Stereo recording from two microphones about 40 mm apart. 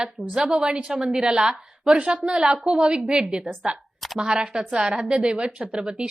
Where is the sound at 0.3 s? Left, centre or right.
Centre.